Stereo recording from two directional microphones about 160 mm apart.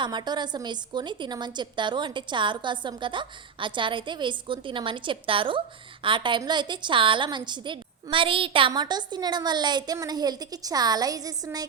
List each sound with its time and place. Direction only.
0.0 s a woman's voice: 30° right (ahead or behind)